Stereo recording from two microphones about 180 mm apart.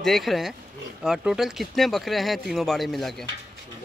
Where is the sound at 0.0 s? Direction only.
Centre (ahead or behind).